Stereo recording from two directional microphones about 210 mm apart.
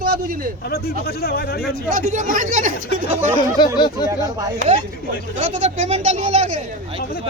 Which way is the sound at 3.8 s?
20° left (ahead or behind).